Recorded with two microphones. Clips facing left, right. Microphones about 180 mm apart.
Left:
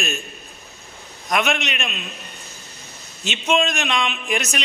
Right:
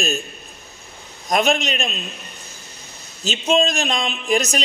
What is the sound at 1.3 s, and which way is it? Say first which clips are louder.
Speech: right 3 dB; 35° right (ahead or behind).